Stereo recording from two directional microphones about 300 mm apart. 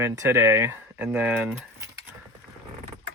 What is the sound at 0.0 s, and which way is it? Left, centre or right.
Speech, centre.